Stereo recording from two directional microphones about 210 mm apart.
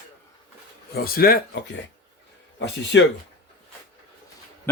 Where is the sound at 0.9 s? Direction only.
45° left (ahead or behind).